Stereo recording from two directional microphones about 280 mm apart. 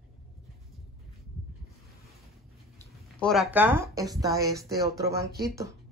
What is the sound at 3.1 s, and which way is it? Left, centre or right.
Speech, centre.